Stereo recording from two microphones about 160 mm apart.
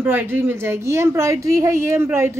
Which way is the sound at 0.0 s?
15° right (ahead or behind).